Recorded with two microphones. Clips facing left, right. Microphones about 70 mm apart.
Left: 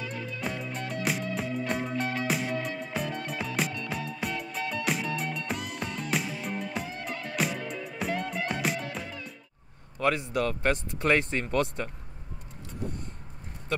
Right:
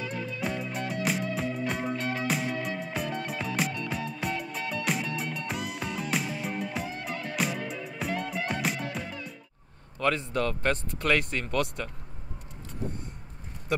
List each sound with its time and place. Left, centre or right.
0.4 s music: centre
9.9 s speech: centre
10.7 s speech: left
13.7 s a sound: centre